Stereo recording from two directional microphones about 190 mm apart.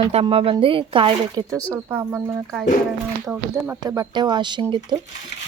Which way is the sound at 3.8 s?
20° right (ahead or behind).